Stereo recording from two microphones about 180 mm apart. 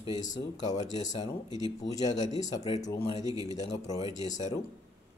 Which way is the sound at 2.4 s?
20° left (ahead or behind).